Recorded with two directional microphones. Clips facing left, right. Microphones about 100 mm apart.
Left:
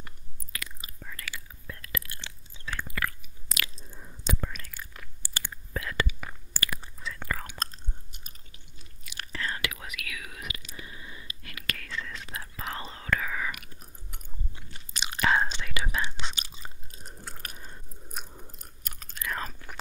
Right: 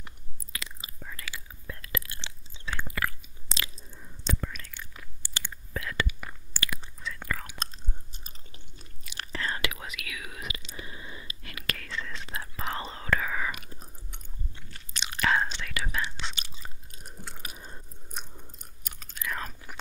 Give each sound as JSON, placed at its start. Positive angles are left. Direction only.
{"t": 0.0, "sound": "whispering", "side_deg": -25}
{"t": 4.2, "sound": "whispering", "side_deg": 15}
{"t": 4.6, "sound": "chewing", "side_deg": 5}
{"t": 6.0, "sound": "whispering", "side_deg": 0}
{"t": 8.1, "sound": "chewing", "side_deg": -30}
{"t": 9.0, "sound": "whispering", "side_deg": -30}
{"t": 14.7, "sound": "chewing", "side_deg": 15}
{"t": 15.5, "sound": "whispering", "side_deg": 15}
{"t": 16.2, "sound": "chewing", "side_deg": 10}
{"t": 17.6, "sound": "biting", "side_deg": -20}
{"t": 18.0, "sound": "chewing", "side_deg": 10}